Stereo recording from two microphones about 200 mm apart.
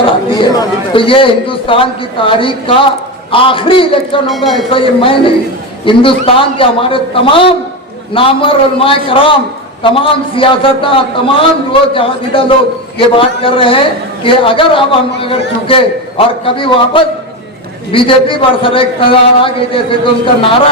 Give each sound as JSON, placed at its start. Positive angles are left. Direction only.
{"t": 0.0, "sound": "a man's voice", "side_deg": 25}
{"t": 4.3, "sound": "speech", "side_deg": 0}
{"t": 4.7, "sound": "a man's voice", "side_deg": 25}